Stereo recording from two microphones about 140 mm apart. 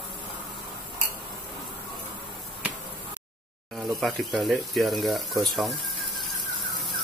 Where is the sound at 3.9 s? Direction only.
Centre (ahead or behind).